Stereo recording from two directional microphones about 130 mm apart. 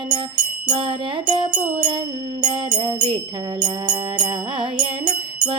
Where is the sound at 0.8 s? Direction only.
40° right (ahead or behind).